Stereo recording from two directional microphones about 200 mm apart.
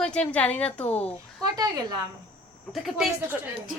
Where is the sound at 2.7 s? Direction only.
Centre (ahead or behind).